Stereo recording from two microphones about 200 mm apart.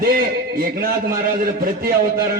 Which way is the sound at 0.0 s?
45° right (ahead or behind).